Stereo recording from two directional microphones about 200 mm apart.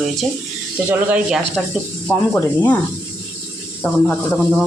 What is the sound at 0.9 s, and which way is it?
Speech, 5° right (ahead or behind).